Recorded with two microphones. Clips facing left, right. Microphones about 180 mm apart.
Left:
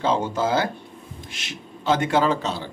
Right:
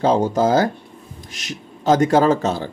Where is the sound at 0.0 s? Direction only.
40° right (ahead or behind).